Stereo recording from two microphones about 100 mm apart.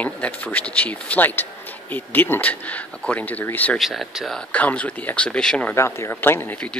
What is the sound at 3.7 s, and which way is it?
Speech, centre (ahead or behind).